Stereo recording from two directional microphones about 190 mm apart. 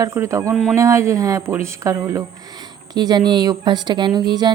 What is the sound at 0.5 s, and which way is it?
Speech, centre (ahead or behind).